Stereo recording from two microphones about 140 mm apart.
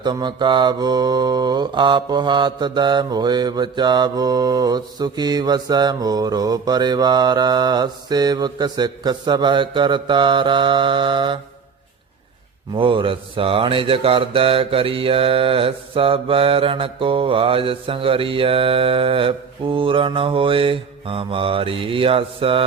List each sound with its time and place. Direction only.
0.0 s mantra: 30° right (ahead or behind)
12.7 s mantra: 40° right (ahead or behind)